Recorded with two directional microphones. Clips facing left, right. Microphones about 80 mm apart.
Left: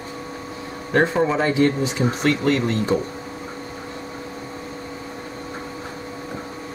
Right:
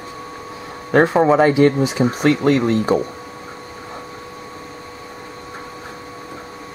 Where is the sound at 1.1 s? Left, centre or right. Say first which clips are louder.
Right 7 dB; right.